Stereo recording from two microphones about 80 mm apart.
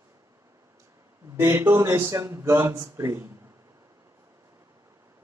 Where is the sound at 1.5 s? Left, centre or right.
Right.